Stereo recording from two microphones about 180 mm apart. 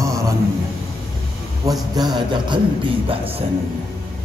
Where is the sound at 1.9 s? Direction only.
25° right (ahead or behind).